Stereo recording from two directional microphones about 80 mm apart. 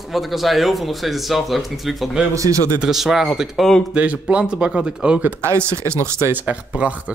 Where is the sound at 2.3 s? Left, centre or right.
Right.